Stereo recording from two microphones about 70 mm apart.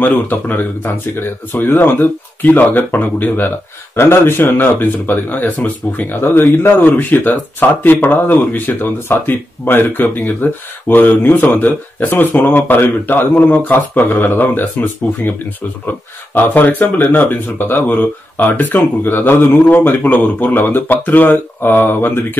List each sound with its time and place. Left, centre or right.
0.0 s speech: left
16.3 s speech: left